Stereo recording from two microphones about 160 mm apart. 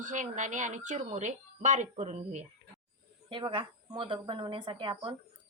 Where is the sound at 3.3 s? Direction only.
30° right (ahead or behind).